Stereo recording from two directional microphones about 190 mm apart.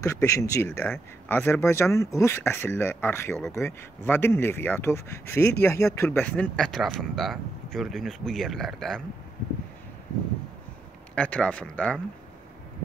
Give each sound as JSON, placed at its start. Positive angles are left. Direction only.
{"t": 0.0, "sound": "speech", "side_deg": 15}
{"t": 11.1, "sound": "speech", "side_deg": 5}